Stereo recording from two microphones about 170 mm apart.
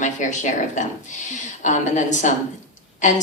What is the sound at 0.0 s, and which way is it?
A woman's voice, 45° left (ahead or behind).